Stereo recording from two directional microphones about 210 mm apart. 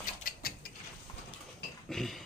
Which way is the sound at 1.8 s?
Centre (ahead or behind).